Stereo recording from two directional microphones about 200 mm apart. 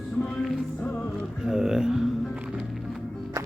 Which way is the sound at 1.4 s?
5° right (ahead or behind).